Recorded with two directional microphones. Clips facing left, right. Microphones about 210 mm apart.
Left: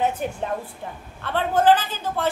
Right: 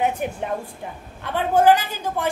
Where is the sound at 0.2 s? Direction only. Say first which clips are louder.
Right 1 dB; 15° right (ahead or behind).